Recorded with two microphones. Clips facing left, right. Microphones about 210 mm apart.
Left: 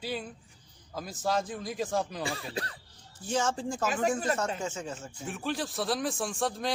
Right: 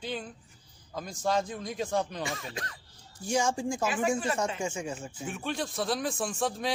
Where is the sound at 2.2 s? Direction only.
35° left (ahead or behind).